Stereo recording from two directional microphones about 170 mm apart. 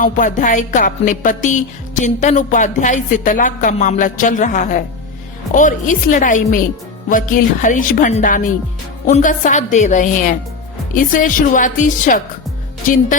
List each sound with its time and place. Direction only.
0.0 s music: 50° left (ahead or behind)